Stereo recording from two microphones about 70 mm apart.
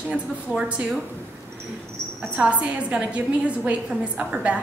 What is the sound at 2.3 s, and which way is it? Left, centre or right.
A woman's voice, centre.